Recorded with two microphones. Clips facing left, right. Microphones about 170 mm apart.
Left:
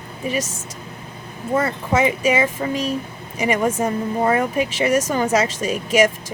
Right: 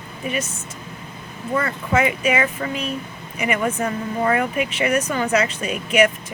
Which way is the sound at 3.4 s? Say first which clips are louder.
Left 3 dB; 30° left (ahead or behind).